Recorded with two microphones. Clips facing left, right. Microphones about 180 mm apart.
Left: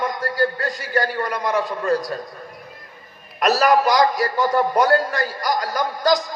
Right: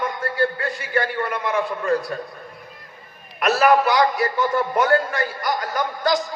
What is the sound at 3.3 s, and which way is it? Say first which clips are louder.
A man's voice: even; 40° left (ahead or behind).